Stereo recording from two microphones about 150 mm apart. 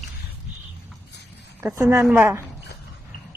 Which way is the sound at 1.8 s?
20° right (ahead or behind).